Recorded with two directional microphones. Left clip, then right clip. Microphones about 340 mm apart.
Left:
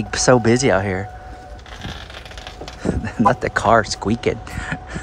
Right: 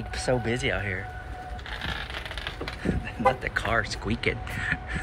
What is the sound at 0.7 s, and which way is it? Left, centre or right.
Speech, left.